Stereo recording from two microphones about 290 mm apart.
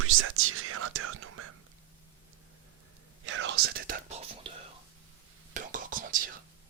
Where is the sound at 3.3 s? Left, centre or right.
Right.